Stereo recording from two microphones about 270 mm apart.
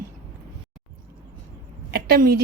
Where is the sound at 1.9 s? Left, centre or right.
Right.